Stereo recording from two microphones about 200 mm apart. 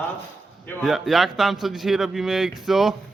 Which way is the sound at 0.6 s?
Centre (ahead or behind).